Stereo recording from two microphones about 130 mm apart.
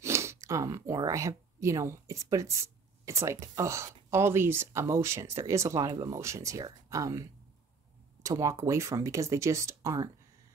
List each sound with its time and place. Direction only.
0.0 s speech: 20° right (ahead or behind)